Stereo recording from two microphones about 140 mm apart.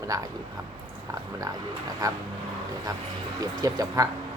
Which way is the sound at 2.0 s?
25° right (ahead or behind).